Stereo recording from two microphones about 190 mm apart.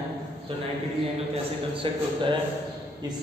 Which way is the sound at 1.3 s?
25° right (ahead or behind).